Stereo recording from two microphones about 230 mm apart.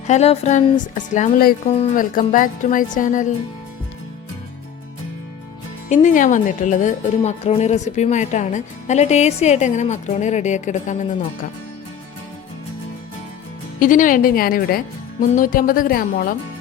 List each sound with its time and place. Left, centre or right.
0.1 s a woman's voice: left
5.9 s a woman's voice: left
13.7 s a woman's voice: left